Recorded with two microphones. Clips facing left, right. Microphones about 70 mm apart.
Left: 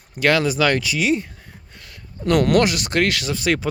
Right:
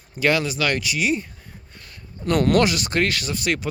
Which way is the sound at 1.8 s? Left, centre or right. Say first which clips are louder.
Left 5 dB; left.